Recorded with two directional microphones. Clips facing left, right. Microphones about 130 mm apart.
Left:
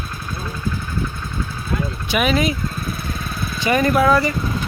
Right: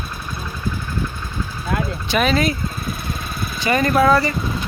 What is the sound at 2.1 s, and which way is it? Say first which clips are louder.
Speech: even; 10° left (ahead or behind).